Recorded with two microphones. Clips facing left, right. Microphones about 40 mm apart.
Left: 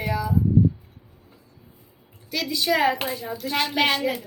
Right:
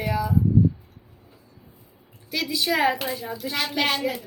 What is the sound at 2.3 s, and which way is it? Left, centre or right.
Speech, centre.